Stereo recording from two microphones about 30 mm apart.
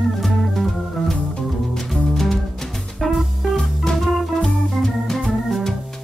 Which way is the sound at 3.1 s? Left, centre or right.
Centre.